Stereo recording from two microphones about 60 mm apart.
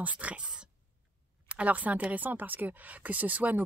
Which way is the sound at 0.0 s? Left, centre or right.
Right.